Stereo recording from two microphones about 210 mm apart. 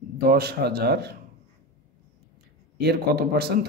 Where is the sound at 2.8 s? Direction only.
50° right (ahead or behind).